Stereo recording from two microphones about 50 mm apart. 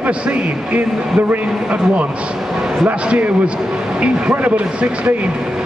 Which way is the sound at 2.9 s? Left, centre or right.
Right.